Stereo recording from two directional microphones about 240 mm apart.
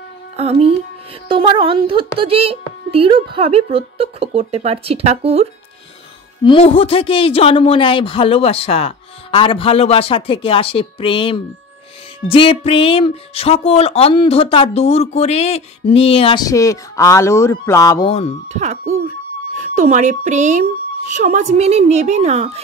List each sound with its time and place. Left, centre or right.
0.4 s a child's voice: right
6.4 s speech: left
18.5 s a child's voice: right